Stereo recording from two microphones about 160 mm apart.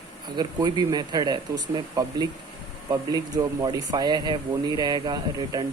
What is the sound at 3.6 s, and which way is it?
Speech, 25° right (ahead or behind).